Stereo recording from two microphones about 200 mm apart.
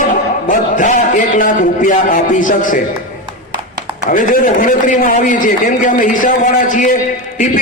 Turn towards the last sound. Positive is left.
turn(degrees=40)  # may be behind; listen again after turning